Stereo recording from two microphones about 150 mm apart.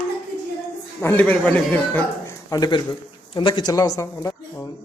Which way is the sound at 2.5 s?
25° left (ahead or behind).